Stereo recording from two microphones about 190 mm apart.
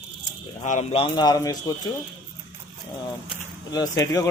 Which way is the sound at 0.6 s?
40° left (ahead or behind).